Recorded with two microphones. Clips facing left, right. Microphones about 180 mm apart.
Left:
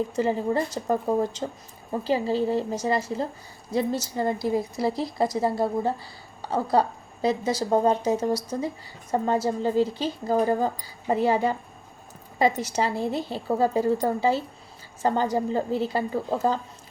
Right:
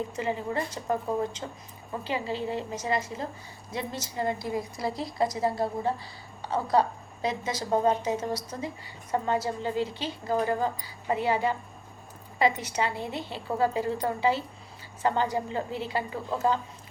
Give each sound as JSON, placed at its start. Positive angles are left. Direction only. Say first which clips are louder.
{"t": 0.2, "sound": "a woman's voice", "louder": "left 7 dB", "side_deg": 35}